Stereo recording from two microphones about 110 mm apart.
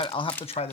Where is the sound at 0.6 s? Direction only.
65° left (ahead or behind).